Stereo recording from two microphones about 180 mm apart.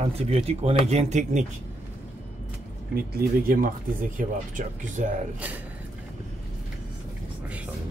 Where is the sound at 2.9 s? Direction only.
60° right (ahead or behind).